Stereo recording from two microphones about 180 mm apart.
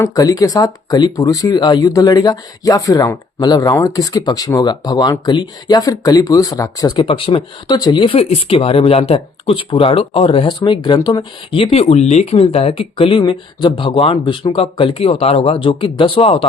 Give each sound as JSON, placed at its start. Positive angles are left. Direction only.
{"t": 0.0, "sound": "speech", "side_deg": 20}